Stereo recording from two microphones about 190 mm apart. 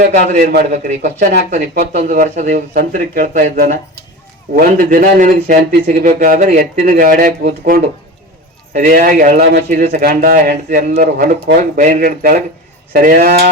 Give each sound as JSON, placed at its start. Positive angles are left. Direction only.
{"t": 0.0, "sound": "a man's voice", "side_deg": -40}
{"t": 1.5, "sound": "speech", "side_deg": -55}